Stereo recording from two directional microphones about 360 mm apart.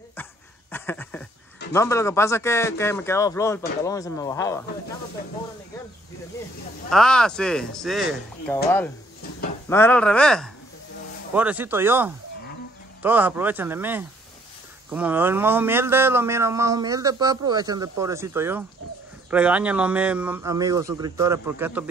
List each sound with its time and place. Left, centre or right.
0.1 s a sound: centre
1.7 s speech: centre
6.9 s speech: centre